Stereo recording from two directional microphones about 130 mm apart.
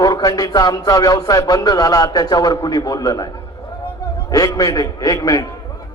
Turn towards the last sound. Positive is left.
turn(degrees=25)  # may be behind; listen again after turning